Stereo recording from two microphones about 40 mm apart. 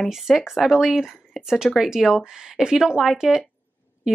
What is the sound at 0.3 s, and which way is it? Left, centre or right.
Speech, centre.